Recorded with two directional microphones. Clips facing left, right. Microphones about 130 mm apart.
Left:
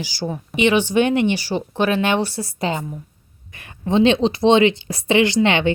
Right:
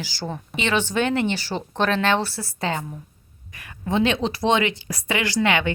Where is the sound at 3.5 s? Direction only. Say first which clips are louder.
Left 5 dB; 25° left (ahead or behind).